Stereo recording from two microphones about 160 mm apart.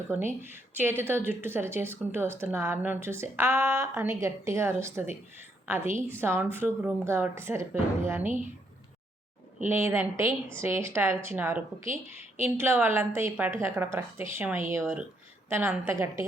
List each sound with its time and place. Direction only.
0.5 s a woman's voice: 15° right (ahead or behind)
8.2 s speech: 50° right (ahead or behind)
9.6 s speech: 15° right (ahead or behind)